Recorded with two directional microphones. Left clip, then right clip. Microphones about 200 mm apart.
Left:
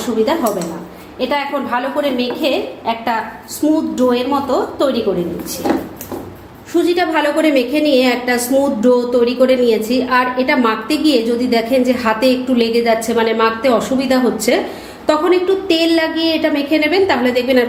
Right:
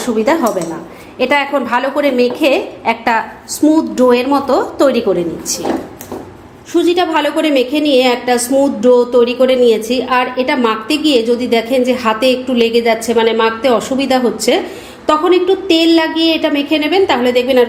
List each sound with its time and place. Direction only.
1.2 s a woman's voice: 45° right (ahead or behind)
6.7 s a woman's voice: 25° right (ahead or behind)